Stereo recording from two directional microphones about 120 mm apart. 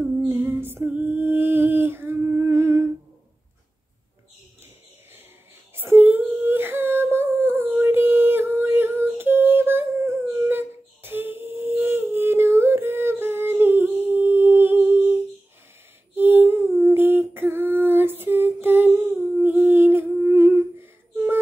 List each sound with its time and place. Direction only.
0.0 s female singing: 20° right (ahead or behind)
5.8 s humming: 15° right (ahead or behind)
16.2 s a sound: 15° right (ahead or behind)
16.7 s female singing: 20° right (ahead or behind)
19.4 s humming: 15° right (ahead or behind)